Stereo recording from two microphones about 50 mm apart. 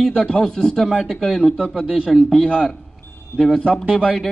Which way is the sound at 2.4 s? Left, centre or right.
Centre.